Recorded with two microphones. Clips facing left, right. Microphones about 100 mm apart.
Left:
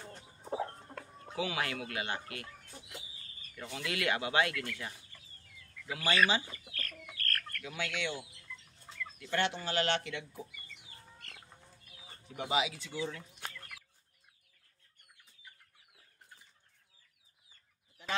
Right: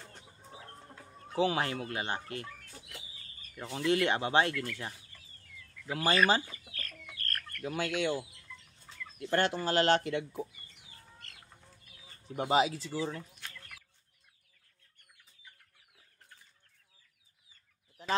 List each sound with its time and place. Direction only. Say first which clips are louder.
0.5 s chicken: left 13 dB; 65° left (ahead or behind)
1.3 s speech: right 6 dB; 30° right (ahead or behind)
3.7 s speech: right 6 dB; 30° right (ahead or behind)
7.2 s chicken: left 2 dB; 25° right (ahead or behind)
7.6 s speech: right 7 dB; 40° right (ahead or behind)
12.3 s speech: right 6 dB; 40° right (ahead or behind)
18.0 s chicken: right 5 dB; 35° right (ahead or behind)